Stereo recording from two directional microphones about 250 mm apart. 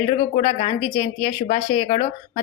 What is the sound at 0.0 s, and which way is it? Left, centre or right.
A woman's voice, left.